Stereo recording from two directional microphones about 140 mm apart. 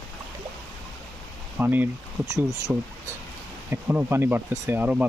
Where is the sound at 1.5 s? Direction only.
10° right (ahead or behind).